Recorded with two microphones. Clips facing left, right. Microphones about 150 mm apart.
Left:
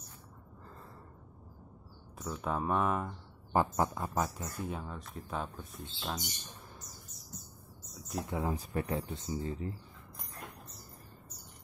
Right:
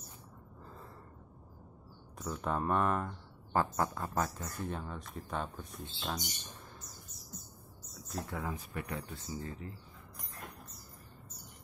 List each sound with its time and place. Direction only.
2.1 s speech: centre (ahead or behind)
3.5 s a sound: 15° left (ahead or behind)
4.2 s speech: 10° left (ahead or behind)
8.1 s speech: 15° left (ahead or behind)
8.4 s speech: 35° left (ahead or behind)
9.1 s speech: 20° left (ahead or behind)